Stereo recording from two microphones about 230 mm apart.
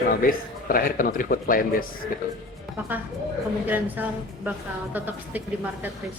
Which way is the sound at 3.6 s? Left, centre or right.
Centre.